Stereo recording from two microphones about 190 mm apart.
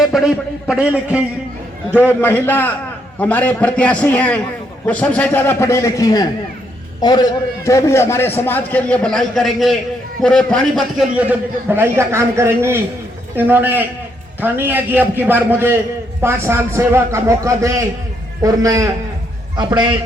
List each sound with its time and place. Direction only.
0.0 s a man's voice: centre (ahead or behind)
2.2 s a man's voice: 10° left (ahead or behind)
11.7 s a man's voice: 15° right (ahead or behind)